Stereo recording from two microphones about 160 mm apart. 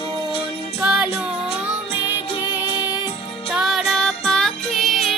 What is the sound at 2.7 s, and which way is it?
Music, 25° left (ahead or behind).